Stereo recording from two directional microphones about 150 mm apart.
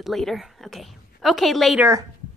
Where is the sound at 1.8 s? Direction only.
20° right (ahead or behind).